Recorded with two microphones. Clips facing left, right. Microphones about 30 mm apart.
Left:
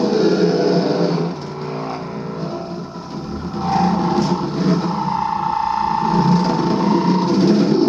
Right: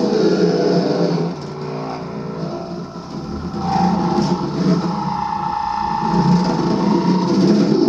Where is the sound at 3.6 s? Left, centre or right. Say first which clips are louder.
Even; left.